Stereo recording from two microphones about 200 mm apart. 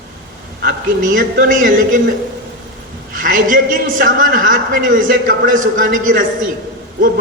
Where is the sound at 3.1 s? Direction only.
40° right (ahead or behind).